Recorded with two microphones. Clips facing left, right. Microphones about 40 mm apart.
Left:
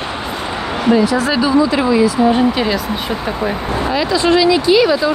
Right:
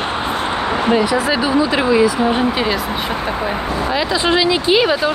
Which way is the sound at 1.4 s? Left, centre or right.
Right.